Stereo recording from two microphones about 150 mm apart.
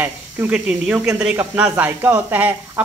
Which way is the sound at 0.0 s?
10° right (ahead or behind).